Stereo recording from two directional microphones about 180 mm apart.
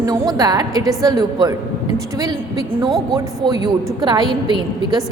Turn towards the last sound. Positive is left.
turn(degrees=-25)  # may be behind; listen again after turning